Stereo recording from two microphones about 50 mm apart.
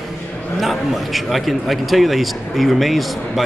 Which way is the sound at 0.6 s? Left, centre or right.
Centre.